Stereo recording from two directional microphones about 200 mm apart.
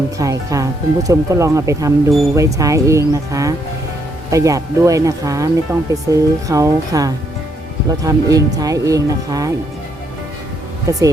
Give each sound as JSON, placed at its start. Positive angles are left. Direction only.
{"t": 0.2, "sound": "speech", "side_deg": -15}
{"t": 10.9, "sound": "speech", "side_deg": -15}